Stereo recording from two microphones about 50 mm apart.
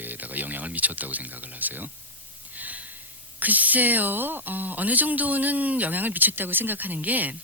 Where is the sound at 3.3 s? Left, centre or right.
Right.